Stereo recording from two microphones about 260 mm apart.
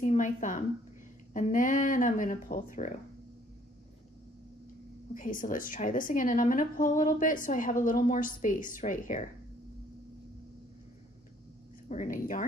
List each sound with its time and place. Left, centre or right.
0.0 s a woman's voice: left
5.1 s a woman's voice: left
11.9 s a woman's voice: left